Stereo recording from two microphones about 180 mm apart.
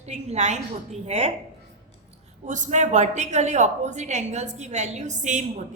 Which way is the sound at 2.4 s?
45° right (ahead or behind).